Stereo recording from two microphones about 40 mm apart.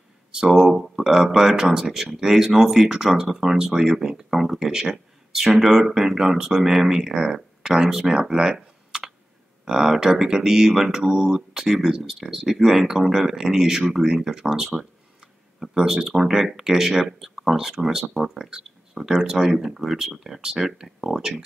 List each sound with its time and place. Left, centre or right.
0.5 s speech: centre
3.5 s speech: centre
8.4 s a sound: centre
9.7 s speech: centre
19.8 s speech: centre
20.2 s speech: centre